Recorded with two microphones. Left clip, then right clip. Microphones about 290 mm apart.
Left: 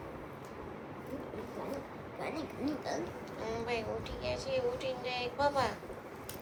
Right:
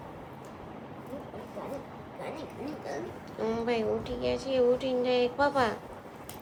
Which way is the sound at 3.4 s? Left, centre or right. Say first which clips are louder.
Right 7 dB; right.